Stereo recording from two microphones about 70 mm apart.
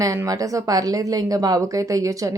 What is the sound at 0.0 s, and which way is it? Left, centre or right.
A woman's voice, right.